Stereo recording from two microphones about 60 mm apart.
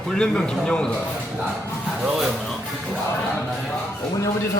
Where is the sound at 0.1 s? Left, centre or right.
Centre.